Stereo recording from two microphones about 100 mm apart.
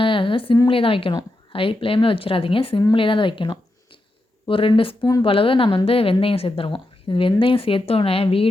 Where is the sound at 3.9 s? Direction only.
55° left (ahead or behind).